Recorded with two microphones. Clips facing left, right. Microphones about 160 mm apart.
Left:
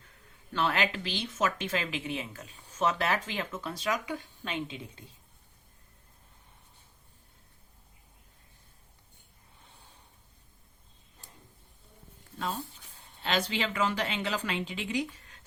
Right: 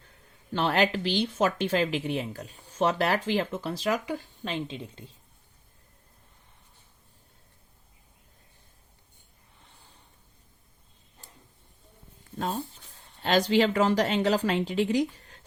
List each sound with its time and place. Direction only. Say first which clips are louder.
0.5 s speech: right 5 dB; 35° right (ahead or behind)
13.2 s speech: right 8 dB; 40° right (ahead or behind)